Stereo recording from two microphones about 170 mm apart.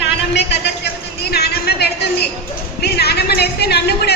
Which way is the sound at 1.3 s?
70° left (ahead or behind).